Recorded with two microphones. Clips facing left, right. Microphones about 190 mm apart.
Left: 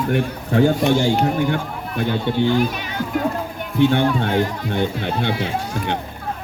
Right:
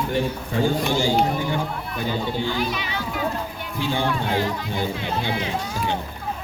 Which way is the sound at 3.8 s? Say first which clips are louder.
Left 8 dB; 65° left (ahead or behind).